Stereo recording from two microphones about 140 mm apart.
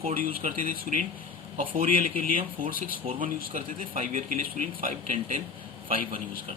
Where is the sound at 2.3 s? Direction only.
85° right.